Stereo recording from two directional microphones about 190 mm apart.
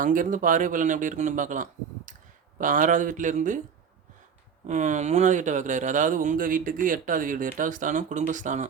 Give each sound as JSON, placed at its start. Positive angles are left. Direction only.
{"t": 0.0, "sound": "speech", "side_deg": -45}
{"t": 4.6, "sound": "speech", "side_deg": -40}